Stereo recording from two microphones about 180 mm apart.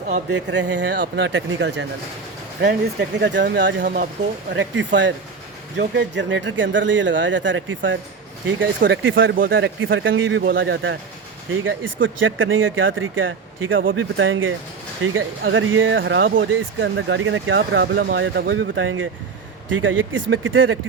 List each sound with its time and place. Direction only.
0.3 s speech: 80° right
2.6 s speech: 70° right (ahead or behind); by 3.8 s 90° right
3.8 s speech: 45° right (ahead or behind)
4.5 s speech: 90° right
5.7 s speech: 75° right (ahead or behind)
9.3 s speech: 55° right (ahead or behind); by 20.7 s 90° right